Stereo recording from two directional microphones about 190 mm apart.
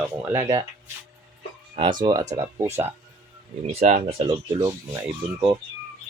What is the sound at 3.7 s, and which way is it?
Speech, 35° right (ahead or behind).